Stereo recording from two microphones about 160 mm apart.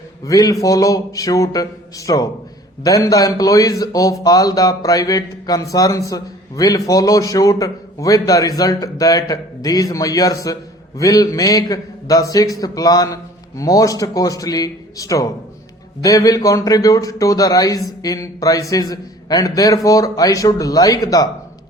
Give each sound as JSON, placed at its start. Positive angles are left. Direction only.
{"t": 0.3, "sound": "a man's voice", "side_deg": 25}